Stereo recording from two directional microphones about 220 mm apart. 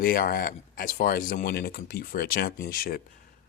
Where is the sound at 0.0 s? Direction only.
40° left (ahead or behind).